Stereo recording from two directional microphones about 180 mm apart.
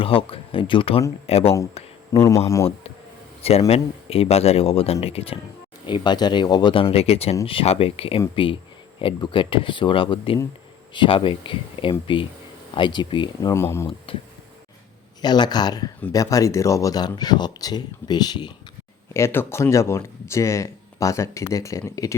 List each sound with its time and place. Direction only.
0.0 s speech: 30° left (ahead or behind)
1.8 s a sound: 35° left (ahead or behind)
2.1 s speech: 20° left (ahead or behind)
3.7 s speech: 35° left (ahead or behind)
13.5 s speech: 15° left (ahead or behind)
14.1 s speech: 30° left (ahead or behind)
19.1 s speech: 15° left (ahead or behind)